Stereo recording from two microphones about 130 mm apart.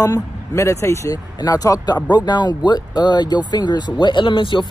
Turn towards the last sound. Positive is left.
turn(degrees=40)  # may be behind; listen again after turning